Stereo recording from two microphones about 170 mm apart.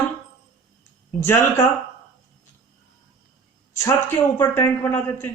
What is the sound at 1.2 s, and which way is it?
Speech, 15° left (ahead or behind).